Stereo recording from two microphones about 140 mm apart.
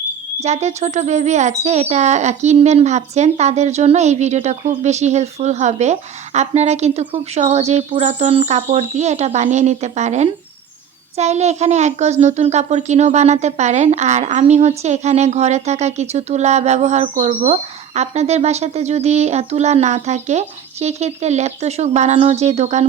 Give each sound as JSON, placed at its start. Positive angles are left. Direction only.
{"t": 0.4, "sound": "speech", "side_deg": -55}